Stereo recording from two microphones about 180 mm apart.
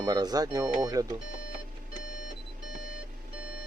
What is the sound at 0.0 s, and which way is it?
Speech, 20° right (ahead or behind).